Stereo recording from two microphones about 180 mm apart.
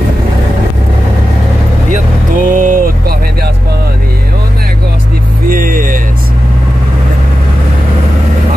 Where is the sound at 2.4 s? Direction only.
50° right (ahead or behind).